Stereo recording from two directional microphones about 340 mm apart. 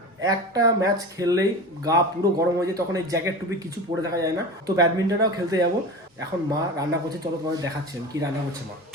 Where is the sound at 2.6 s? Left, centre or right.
Centre.